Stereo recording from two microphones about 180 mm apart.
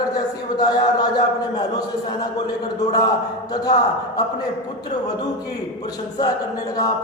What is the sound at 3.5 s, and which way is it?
Speech, 20° left (ahead or behind).